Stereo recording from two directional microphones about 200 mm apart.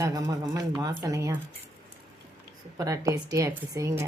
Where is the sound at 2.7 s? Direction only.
15° right (ahead or behind).